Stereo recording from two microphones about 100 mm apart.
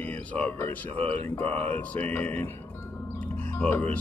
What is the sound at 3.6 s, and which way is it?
Speech, 20° left (ahead or behind).